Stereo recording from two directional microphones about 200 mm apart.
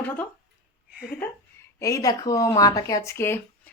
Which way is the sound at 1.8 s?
15° left (ahead or behind).